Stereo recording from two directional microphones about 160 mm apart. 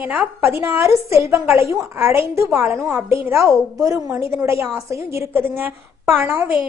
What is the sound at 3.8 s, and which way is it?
A woman's voice, 20° right (ahead or behind).